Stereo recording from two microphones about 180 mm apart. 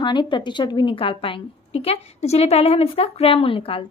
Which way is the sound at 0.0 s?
25° left (ahead or behind).